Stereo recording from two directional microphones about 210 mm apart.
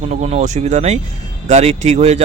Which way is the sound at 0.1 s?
35° right (ahead or behind).